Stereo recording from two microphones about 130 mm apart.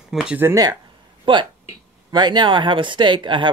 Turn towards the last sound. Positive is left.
turn(degrees=-35)  # may be behind; listen again after turning